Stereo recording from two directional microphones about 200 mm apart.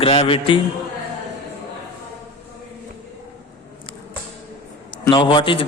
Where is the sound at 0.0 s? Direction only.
25° left (ahead or behind).